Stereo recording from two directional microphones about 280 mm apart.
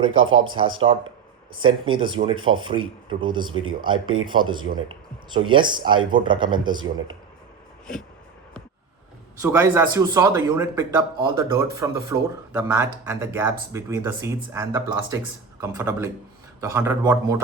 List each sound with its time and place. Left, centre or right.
0.0 s speech: right
0.8 s a man's voice: centre
9.4 s a man's voice: centre